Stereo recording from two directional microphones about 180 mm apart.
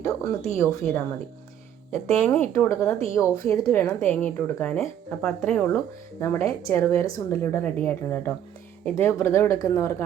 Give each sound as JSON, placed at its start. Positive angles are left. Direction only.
{"t": 0.0, "sound": "speech", "side_deg": 15}
{"t": 2.2, "sound": "speech", "side_deg": 10}